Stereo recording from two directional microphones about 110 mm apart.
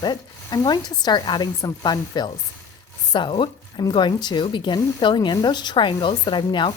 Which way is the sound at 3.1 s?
45° left (ahead or behind).